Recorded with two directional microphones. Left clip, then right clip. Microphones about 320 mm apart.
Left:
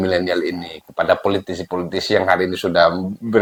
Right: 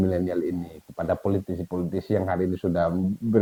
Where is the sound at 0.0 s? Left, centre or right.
Centre.